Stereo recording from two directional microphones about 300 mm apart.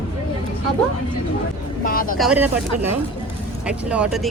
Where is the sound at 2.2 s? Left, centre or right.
Centre.